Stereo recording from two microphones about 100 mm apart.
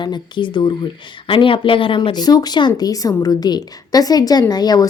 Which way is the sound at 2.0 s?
45° left (ahead or behind).